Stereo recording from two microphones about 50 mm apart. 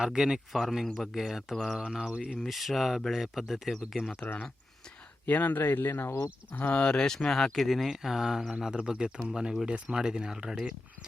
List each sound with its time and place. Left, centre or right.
0.0 s speech: centre
1.9 s speech: centre
2.5 s speech: centre
4.2 s speech: left
5.2 s speech: left
5.9 s speech: left
6.5 s speech: left
6.8 s speech: centre